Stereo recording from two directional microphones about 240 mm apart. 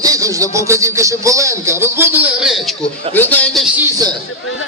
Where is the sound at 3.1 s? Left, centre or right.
Centre.